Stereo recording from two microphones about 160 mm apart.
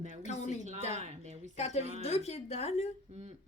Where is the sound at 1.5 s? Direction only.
45° left (ahead or behind).